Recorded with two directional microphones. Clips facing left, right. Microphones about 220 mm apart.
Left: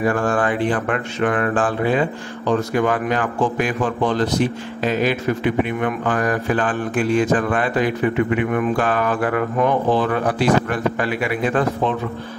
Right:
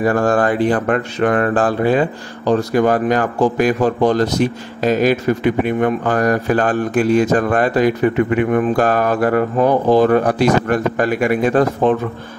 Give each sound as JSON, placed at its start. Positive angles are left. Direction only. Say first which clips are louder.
{"t": 0.0, "sound": "speech", "louder": "right 4 dB", "side_deg": -40}